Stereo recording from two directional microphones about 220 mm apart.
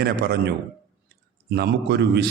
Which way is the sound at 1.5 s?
50° right (ahead or behind).